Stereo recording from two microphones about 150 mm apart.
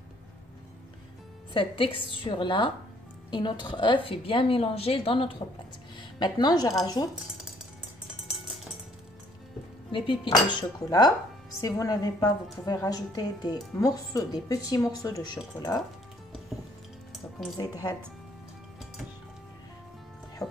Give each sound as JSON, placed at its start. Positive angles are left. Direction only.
{"t": 1.5, "sound": "a woman's voice", "side_deg": 35}
{"t": 9.8, "sound": "a woman's voice", "side_deg": 35}
{"t": 17.1, "sound": "music", "side_deg": 0}
{"t": 17.6, "sound": "speech", "side_deg": 25}